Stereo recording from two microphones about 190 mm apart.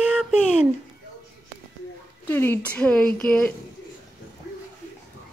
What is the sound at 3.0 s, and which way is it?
Speech, 50° left (ahead or behind).